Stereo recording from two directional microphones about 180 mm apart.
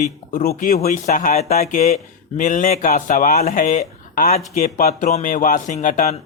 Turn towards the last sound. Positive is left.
turn(degrees=40)  # may be behind; listen again after turning